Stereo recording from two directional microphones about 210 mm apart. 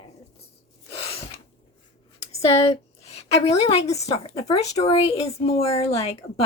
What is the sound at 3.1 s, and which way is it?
A woman's voice, 30° left (ahead or behind).